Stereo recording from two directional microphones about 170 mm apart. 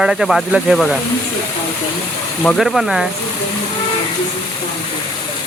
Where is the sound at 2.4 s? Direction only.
Centre (ahead or behind).